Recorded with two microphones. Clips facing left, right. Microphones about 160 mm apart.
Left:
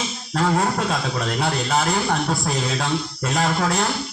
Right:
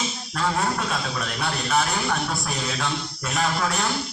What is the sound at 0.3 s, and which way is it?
A man's voice, 35° left (ahead or behind).